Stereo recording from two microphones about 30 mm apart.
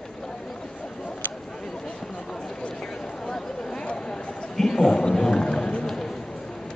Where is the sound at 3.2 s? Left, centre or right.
Centre.